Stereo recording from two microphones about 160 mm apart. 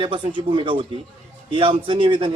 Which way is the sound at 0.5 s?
30° right (ahead or behind).